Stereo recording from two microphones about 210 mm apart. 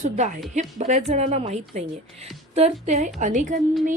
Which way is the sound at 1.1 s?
30° right (ahead or behind).